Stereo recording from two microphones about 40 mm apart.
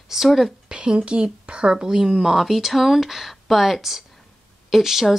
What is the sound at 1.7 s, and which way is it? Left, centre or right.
Speech, centre.